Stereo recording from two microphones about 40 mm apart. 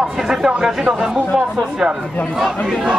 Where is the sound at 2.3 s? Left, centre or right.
Centre.